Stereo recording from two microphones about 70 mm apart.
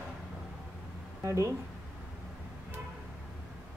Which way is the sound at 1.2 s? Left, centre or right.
Right.